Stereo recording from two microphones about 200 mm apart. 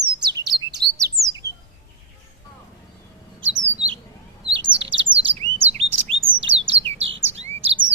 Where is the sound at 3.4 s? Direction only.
70° right (ahead or behind).